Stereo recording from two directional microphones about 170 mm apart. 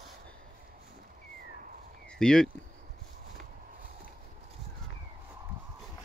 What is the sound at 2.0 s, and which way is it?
Speech, 5° left (ahead or behind).